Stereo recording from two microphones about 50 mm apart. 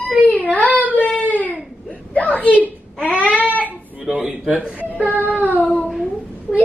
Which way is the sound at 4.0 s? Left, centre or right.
Centre.